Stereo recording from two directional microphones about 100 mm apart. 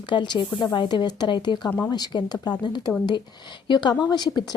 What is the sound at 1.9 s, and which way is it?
A woman's voice, 45° left (ahead or behind).